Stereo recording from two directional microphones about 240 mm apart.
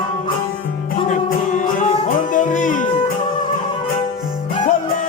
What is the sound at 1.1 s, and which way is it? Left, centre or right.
Music, left.